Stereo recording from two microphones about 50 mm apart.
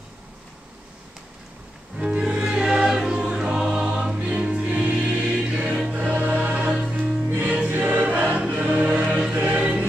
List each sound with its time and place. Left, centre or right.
2.0 s music: centre
3.5 s choir: centre
6.1 s choir: right
6.9 s music: centre
7.6 s choir: right
7.9 s choir: right
8.4 s choir: centre
8.6 s music: right